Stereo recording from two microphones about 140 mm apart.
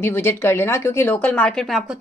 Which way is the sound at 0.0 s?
15° left (ahead or behind).